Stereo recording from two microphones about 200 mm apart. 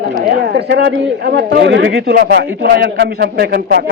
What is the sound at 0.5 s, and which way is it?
A man's voice, 60° right (ahead or behind).